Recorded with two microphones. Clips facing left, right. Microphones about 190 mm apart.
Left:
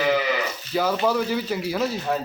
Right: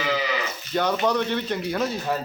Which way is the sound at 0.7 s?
5° left (ahead or behind).